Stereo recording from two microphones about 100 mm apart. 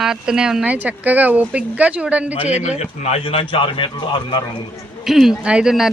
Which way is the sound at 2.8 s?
85° left.